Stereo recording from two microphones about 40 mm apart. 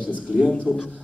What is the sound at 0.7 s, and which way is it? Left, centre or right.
Speech, left.